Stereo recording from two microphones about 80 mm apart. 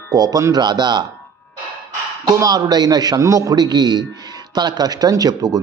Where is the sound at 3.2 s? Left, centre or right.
Right.